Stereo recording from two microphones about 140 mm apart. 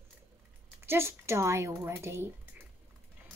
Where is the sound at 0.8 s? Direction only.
15° right (ahead or behind).